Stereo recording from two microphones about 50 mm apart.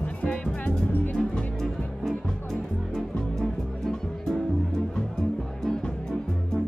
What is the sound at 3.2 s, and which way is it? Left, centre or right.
Music, centre.